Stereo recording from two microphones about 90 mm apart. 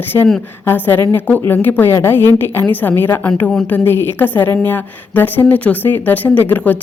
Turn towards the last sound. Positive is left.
turn(degrees=20)  # may be behind; listen again after turning